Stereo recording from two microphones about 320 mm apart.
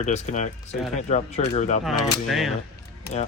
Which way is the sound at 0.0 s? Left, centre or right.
Left.